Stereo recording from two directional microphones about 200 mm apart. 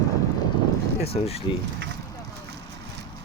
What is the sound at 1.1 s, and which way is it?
Speech, 30° left (ahead or behind).